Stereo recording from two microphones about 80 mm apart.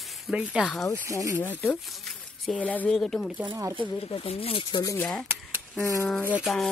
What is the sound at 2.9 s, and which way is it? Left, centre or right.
Speech, centre.